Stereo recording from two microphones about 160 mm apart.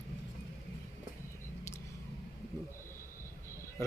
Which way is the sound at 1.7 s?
15° left (ahead or behind).